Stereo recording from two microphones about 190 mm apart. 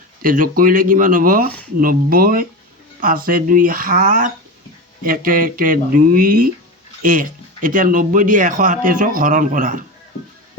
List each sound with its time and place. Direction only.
0.2 s speech: 45° right (ahead or behind)